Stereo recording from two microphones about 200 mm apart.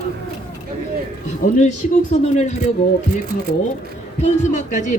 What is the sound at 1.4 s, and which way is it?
Speech, 40° left (ahead or behind).